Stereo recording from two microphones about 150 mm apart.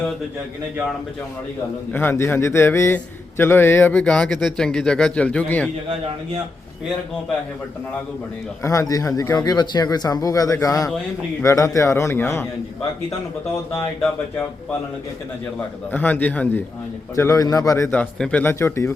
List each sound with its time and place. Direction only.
1.9 s a man's voice: 15° left (ahead or behind)
8.6 s speech: 20° left (ahead or behind)
15.5 s a man's voice: 10° left (ahead or behind)
17.2 s a man's voice: 20° left (ahead or behind)